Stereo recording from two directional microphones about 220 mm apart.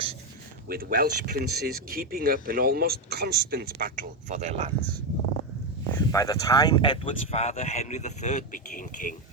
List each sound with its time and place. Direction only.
0.7 s speech: 40° right (ahead or behind)
6.1 s speech: 15° left (ahead or behind); by 9.1 s 35° left (ahead or behind)